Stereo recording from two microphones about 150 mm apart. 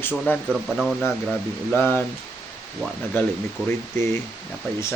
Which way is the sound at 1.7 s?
15° left (ahead or behind).